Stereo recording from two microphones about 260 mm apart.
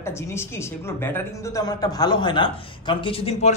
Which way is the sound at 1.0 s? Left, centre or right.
Centre.